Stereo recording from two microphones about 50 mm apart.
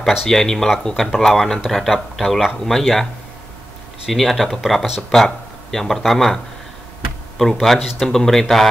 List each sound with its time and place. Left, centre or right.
0.0 s speech: centre
4.1 s speech: centre